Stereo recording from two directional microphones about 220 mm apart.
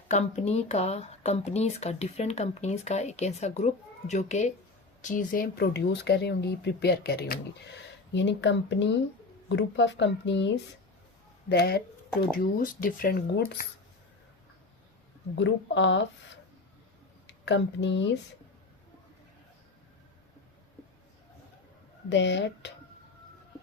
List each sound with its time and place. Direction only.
0.1 s a woman's voice: 30° left (ahead or behind)
15.4 s a woman's voice: 55° left (ahead or behind)
22.1 s speech: 55° left (ahead or behind)